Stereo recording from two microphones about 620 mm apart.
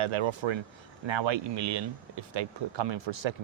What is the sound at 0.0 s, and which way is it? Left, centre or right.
Speech, right.